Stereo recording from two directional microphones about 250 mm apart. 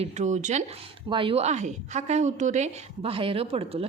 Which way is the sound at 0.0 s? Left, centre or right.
Right.